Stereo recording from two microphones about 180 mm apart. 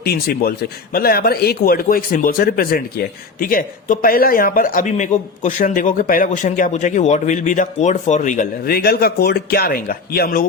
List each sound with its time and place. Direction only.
0.0 s a man's voice: 60° left (ahead or behind)